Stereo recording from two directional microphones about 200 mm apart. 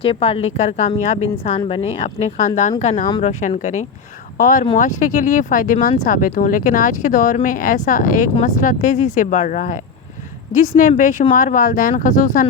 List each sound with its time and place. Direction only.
0.0 s speech: 30° left (ahead or behind)